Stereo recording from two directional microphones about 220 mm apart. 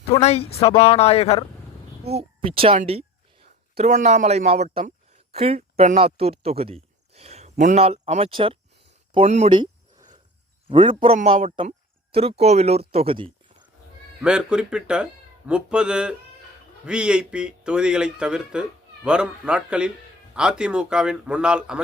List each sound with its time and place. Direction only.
0.1 s speech: 30° left (ahead or behind)
2.0 s speech: 25° right (ahead or behind)
10.7 s speech: 25° right (ahead or behind)
12.9 s a sound: 25° right (ahead or behind)
14.2 s speech: 5° right (ahead or behind)